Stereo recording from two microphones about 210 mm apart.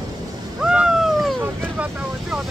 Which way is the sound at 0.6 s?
5° right (ahead or behind).